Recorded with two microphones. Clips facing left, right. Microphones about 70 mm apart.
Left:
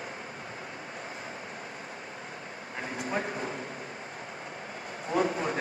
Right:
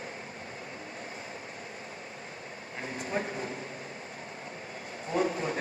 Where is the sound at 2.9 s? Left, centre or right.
Left.